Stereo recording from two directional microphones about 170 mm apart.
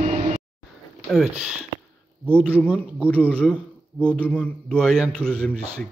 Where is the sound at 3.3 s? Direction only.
5° left (ahead or behind).